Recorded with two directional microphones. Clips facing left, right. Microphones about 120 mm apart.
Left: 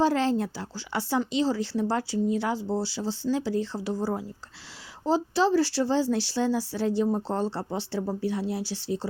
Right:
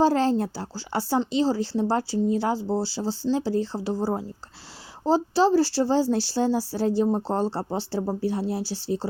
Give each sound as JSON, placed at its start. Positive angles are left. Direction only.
{"t": 0.0, "sound": "speech", "side_deg": -35}